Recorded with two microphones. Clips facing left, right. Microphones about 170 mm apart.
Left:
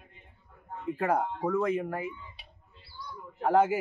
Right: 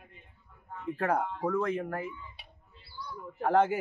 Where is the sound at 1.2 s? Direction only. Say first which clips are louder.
Left 1 dB; 15° left (ahead or behind).